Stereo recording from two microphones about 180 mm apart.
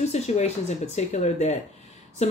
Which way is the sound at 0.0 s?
40° left (ahead or behind).